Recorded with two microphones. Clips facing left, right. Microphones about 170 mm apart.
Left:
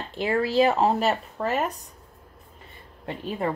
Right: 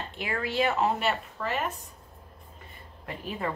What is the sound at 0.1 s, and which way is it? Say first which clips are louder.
Speech: left 10 dB; 35° left (ahead or behind).